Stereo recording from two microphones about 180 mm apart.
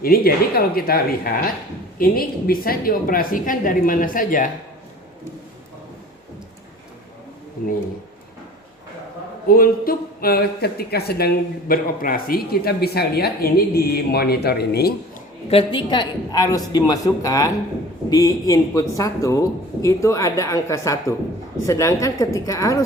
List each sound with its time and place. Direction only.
0.0 s a woman's voice: 55° left (ahead or behind)
9.5 s speech: 55° left (ahead or behind)
15.4 s a woman's voice: 30° left (ahead or behind)